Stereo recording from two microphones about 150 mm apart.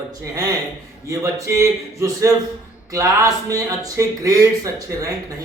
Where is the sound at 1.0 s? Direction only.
20° right (ahead or behind).